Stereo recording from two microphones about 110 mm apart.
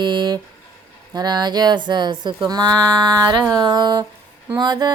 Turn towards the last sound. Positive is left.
turn(degrees=-40)  # may be behind; listen again after turning